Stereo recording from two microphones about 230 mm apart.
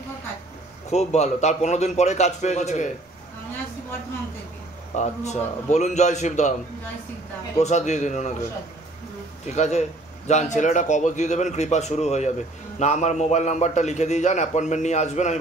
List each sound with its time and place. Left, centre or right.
0.8 s a man's voice: left
4.9 s a man's voice: left
7.5 s a man's voice: left
9.5 s a man's voice: left